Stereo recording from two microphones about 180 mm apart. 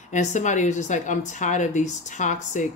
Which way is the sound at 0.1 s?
40° left (ahead or behind).